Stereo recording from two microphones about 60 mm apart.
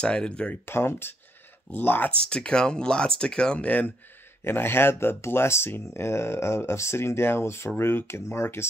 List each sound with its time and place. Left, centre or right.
0.0 s speech: centre
0.7 s speech: left
2.0 s speech: centre
4.5 s speech: left